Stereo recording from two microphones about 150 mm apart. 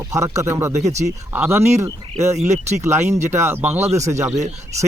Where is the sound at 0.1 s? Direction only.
20° right (ahead or behind).